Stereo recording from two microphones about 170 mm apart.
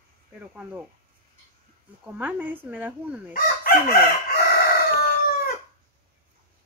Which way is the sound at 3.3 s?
60° left (ahead or behind).